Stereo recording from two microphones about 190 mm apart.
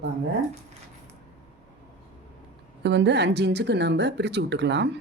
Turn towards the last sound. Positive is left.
turn(degrees=-65)  # may be behind; listen again after turning